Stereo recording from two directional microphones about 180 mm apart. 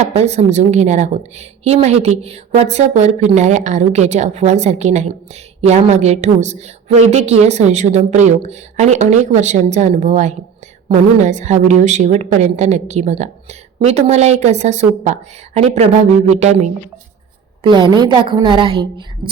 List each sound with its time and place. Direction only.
0.0 s a woman's voice: 35° right (ahead or behind)
17.6 s a woman's voice: 25° right (ahead or behind)